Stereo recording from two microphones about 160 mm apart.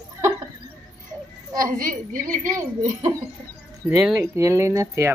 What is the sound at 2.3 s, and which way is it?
Speech, 20° right (ahead or behind).